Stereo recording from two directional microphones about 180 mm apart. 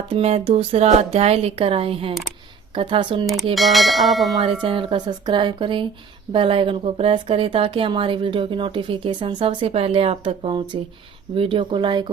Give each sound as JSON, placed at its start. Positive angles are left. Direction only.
{"t": 0.1, "sound": "speech", "side_deg": -35}
{"t": 3.5, "sound": "bell", "side_deg": 0}
{"t": 4.6, "sound": "speech", "side_deg": -30}